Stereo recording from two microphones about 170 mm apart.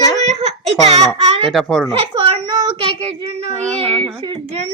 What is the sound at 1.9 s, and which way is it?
Child singing, 30° right (ahead or behind).